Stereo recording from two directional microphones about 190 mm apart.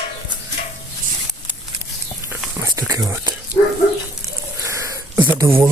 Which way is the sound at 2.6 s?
15° right (ahead or behind).